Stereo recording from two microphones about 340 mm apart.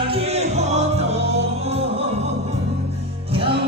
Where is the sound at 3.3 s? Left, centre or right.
Centre.